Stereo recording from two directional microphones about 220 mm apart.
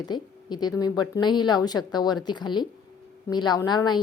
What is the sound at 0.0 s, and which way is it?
Speech, 20° left (ahead or behind).